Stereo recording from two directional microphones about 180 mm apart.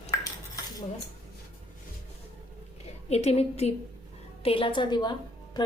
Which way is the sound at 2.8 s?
35° left (ahead or behind).